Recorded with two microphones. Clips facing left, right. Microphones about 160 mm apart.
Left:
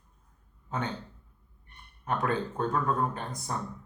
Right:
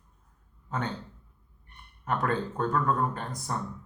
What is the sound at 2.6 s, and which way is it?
Speech, 15° left (ahead or behind).